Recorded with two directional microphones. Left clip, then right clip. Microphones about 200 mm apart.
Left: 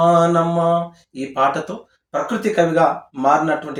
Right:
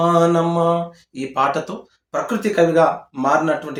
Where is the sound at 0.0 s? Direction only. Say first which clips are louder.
Left 1 dB; 15° right (ahead or behind).